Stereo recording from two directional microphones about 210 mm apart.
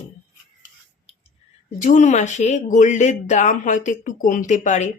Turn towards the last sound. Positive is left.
turn(degrees=35)  # may be behind; listen again after turning